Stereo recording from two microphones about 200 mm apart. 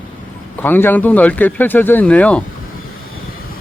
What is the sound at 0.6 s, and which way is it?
Speech, 10° left (ahead or behind).